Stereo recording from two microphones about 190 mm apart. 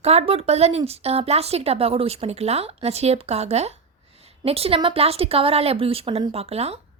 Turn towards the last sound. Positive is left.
turn(degrees=-30)  # may be behind; listen again after turning